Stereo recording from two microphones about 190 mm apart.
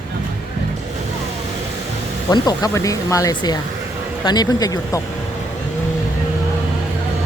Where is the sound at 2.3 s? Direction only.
20° left (ahead or behind).